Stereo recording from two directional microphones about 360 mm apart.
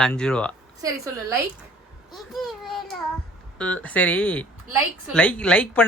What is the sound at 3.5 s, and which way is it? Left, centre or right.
A child's voice, centre.